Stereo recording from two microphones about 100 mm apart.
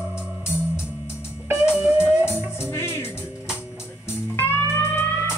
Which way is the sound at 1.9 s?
15° right (ahead or behind).